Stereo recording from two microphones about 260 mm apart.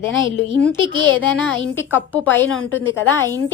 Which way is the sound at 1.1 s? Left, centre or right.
Left.